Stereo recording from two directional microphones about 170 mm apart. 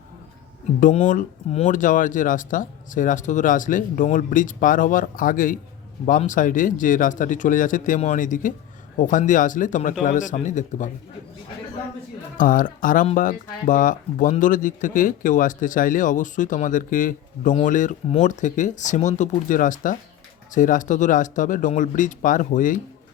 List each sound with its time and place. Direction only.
1.0 s speech: 45° left (ahead or behind)
12.4 s speech: 50° left (ahead or behind)